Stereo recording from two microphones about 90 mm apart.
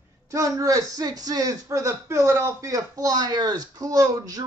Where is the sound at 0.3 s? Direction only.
40° right (ahead or behind).